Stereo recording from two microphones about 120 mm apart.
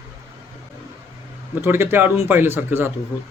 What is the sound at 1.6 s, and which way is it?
Speech, 20° right (ahead or behind).